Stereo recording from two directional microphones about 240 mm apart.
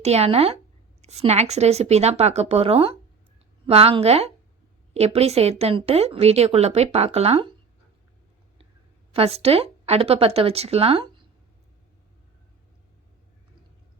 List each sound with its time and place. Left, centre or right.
0.0 s a woman's voice: right
9.1 s a woman's voice: right